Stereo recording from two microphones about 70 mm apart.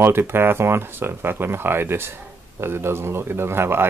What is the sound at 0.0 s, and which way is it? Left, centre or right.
Speech, right.